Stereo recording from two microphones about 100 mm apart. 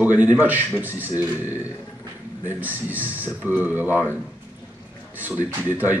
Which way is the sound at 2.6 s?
15° right (ahead or behind).